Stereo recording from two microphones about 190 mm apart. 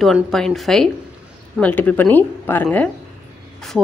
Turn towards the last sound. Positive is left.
turn(degrees=0)  # may be behind; listen again after turning